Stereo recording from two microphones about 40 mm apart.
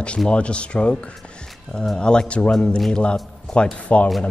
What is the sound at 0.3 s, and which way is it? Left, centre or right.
Speech, left.